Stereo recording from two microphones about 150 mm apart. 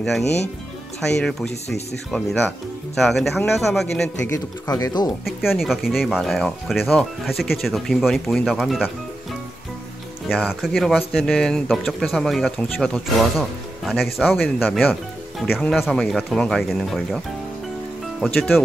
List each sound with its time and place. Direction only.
0.2 s speech: 45° left (ahead or behind)
1.0 s speech: 5° left (ahead or behind)
3.0 s speech: centre (ahead or behind)
4.3 s speech: 25° left (ahead or behind)
5.2 s speech: centre (ahead or behind)
10.2 s speech: 5° right (ahead or behind)
18.2 s speech: 5° left (ahead or behind)